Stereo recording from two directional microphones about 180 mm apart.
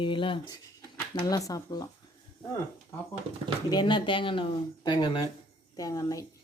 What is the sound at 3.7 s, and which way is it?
Speech, 25° left (ahead or behind).